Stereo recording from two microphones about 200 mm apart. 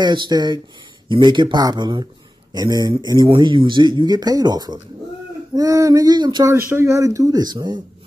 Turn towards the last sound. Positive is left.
turn(degrees=-20)  # may be behind; listen again after turning